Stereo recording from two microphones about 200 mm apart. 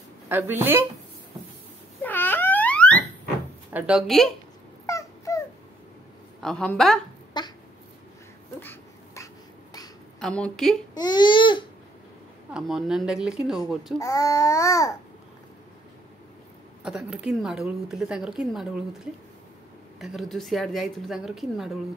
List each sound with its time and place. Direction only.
0.3 s a woman's voice: 10° right (ahead or behind)
2.0 s a sound: 10° left (ahead or behind)
3.7 s a woman's voice: 5° right (ahead or behind)
4.8 s dog: 15° left (ahead or behind)
6.4 s a woman's voice: 5° left (ahead or behind)
7.3 s a sound: 20° left (ahead or behind)
8.5 s a sound: 15° left (ahead or behind)
10.2 s a woman's voice: 5° left (ahead or behind)
11.0 s speech: 20° left (ahead or behind)
12.5 s a woman's voice: centre (ahead or behind)
13.9 s speech: 15° left (ahead or behind)
16.8 s a woman's voice: 5° right (ahead or behind)
20.0 s a woman's voice: centre (ahead or behind)